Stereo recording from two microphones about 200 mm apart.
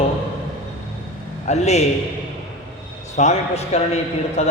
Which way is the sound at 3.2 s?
35° left (ahead or behind).